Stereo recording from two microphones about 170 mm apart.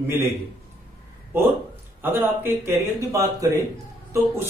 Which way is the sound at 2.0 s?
10° right (ahead or behind).